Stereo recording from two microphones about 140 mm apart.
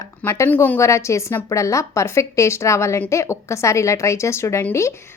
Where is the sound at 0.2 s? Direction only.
15° left (ahead or behind).